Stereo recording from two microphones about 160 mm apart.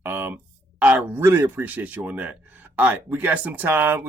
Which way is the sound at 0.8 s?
10° right (ahead or behind).